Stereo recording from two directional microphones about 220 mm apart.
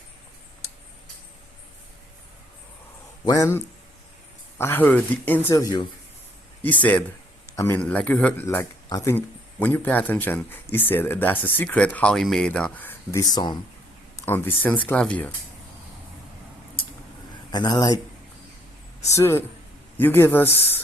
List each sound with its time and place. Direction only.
3.2 s a man's voice: 15° left (ahead or behind)
14.2 s speech: 10° left (ahead or behind)
17.5 s a man's voice: 20° left (ahead or behind)
19.1 s a man's voice: 10° left (ahead or behind)